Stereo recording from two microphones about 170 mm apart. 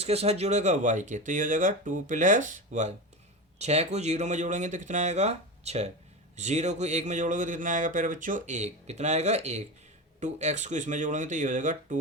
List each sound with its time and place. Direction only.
0.0 s speech: 35° right (ahead or behind)